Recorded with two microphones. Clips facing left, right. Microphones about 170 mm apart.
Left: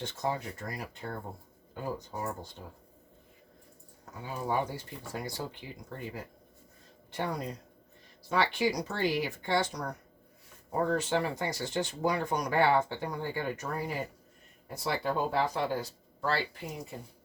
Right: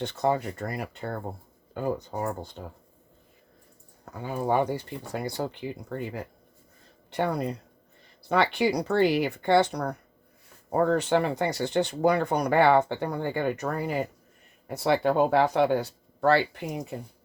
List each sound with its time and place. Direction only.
0.0 s speech: 65° right (ahead or behind)
4.1 s speech: 60° right (ahead or behind)